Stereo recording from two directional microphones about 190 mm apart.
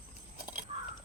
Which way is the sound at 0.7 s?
30° right (ahead or behind).